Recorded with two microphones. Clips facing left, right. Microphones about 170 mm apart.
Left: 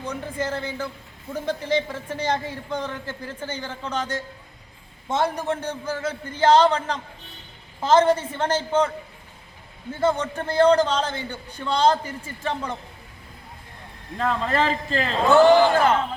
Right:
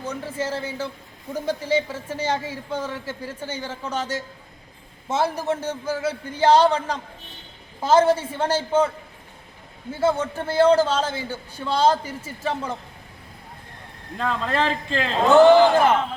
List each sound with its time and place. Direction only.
0.3 s a man's voice: 5° right (ahead or behind)
9.9 s a man's voice: 5° right (ahead or behind)
14.2 s speech: centre (ahead or behind)
15.3 s a man's voice: 15° right (ahead or behind)